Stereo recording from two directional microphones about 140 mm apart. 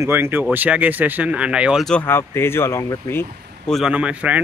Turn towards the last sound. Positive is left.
turn(degrees=-10)  # may be behind; listen again after turning